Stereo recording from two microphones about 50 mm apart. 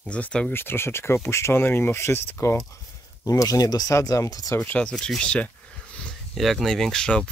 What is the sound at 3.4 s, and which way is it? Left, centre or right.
Speech, left.